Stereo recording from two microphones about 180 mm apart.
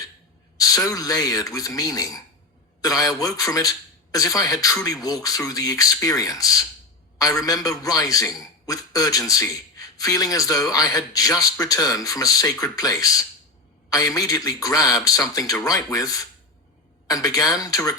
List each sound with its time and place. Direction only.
0.6 s a man's voice: 20° left (ahead or behind)